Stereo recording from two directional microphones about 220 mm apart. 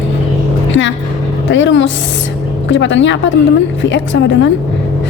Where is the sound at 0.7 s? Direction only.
55° left (ahead or behind).